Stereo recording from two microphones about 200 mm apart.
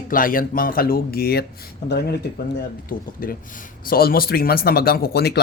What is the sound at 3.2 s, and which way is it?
Speech, 45° left (ahead or behind).